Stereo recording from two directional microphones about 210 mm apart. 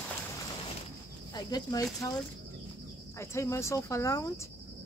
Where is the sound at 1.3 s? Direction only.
20° left (ahead or behind).